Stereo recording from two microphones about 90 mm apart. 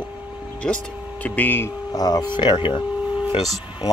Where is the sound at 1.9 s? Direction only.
45° left (ahead or behind).